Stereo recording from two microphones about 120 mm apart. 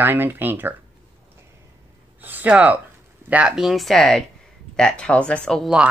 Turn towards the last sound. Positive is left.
turn(degrees=5)  # may be behind; listen again after turning